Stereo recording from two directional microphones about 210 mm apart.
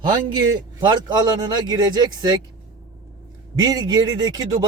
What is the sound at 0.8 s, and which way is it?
Speech, 20° right (ahead or behind).